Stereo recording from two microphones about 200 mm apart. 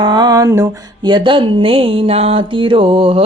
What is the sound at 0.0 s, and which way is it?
Mantra, 20° right (ahead or behind).